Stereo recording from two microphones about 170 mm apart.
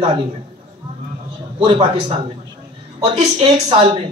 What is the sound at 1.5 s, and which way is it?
Speech, 30° right (ahead or behind).